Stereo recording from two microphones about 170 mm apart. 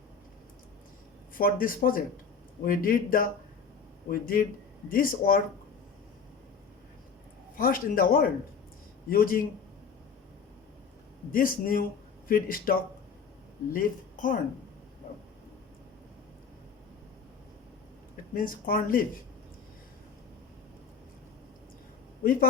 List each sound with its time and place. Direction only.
1.4 s speech: 55° left (ahead or behind)
7.5 s speech: 55° left (ahead or behind)
11.3 s speech: 55° left (ahead or behind)
13.7 s speech: 55° left (ahead or behind)
18.3 s speech: 55° left (ahead or behind)
22.2 s a man's voice: 60° left (ahead or behind)